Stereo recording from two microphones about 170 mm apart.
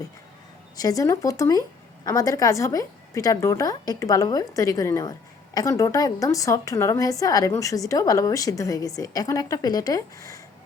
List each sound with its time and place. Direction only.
0.8 s a woman's voice: 20° left (ahead or behind)